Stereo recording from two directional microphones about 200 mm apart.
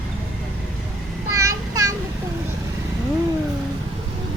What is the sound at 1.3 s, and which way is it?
Child singing, 15° right (ahead or behind).